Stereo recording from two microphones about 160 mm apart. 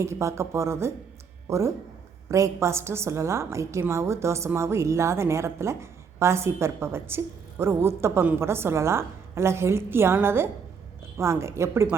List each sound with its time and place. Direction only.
0.0 s a woman's voice: 20° right (ahead or behind)